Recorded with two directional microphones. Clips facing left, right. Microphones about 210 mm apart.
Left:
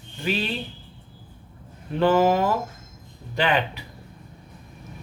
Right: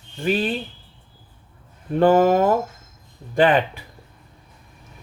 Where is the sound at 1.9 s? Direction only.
45° right (ahead or behind).